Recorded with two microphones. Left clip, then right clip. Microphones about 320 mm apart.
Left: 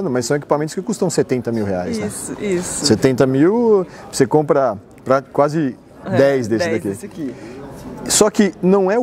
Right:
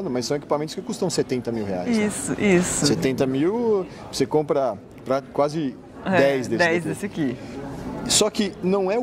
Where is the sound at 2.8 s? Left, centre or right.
Left.